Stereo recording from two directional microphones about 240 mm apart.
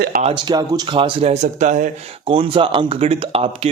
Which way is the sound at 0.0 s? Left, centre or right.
Right.